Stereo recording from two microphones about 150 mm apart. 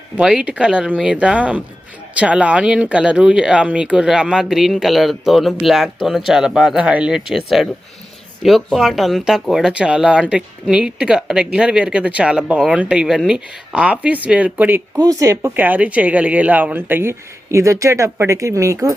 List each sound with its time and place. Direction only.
0.2 s speech: 5° right (ahead or behind)
14.9 s speech: 25° right (ahead or behind)